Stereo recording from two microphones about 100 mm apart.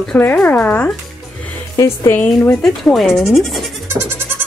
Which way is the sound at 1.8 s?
30° left (ahead or behind).